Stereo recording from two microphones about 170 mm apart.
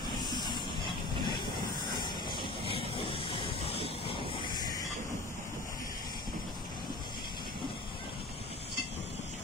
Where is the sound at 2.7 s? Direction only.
30° left (ahead or behind).